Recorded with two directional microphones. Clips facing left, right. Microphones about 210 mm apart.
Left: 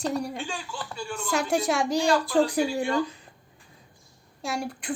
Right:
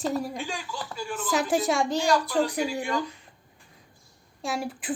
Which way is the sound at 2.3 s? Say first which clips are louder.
Left 3 dB; 30° left (ahead or behind).